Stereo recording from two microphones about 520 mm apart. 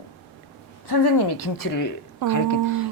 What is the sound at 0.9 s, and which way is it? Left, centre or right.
A woman's voice, left.